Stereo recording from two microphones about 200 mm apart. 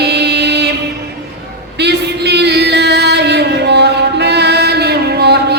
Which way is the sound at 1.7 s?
55° right (ahead or behind).